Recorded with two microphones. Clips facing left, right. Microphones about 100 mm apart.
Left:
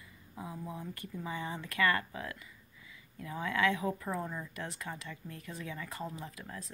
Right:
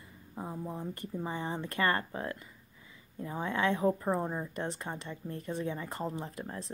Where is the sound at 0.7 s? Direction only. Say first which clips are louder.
Right 4 dB; 40° right (ahead or behind).